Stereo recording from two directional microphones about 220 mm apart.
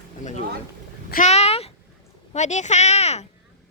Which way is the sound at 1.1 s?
30° left (ahead or behind).